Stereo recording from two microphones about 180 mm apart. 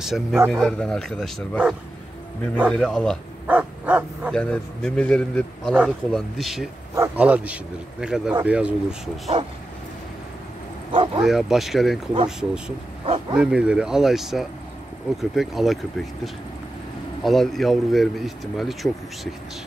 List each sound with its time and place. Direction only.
0.0 s a man's voice: centre (ahead or behind)
3.4 s dog: 10° right (ahead or behind)
4.3 s a man's voice: 5° left (ahead or behind)
10.9 s bow-wow: 30° right (ahead or behind)
11.2 s a man's voice: centre (ahead or behind)
17.2 s a man's voice: centre (ahead or behind)